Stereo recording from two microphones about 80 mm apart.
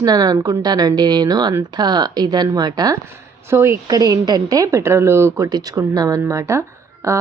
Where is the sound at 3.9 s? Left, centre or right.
Right.